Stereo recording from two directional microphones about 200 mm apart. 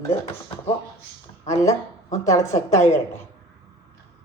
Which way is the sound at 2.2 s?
15° left (ahead or behind).